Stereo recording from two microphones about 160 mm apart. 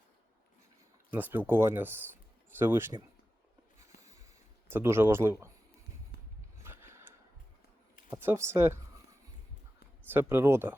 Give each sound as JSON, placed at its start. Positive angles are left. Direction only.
{"t": 1.1, "sound": "speech", "side_deg": -10}
{"t": 4.7, "sound": "speech", "side_deg": -15}
{"t": 6.6, "sound": "a sound", "side_deg": -15}
{"t": 8.1, "sound": "speech", "side_deg": -15}
{"t": 10.1, "sound": "speech", "side_deg": -15}